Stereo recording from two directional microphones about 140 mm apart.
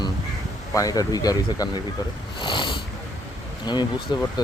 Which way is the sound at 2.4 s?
35° left (ahead or behind).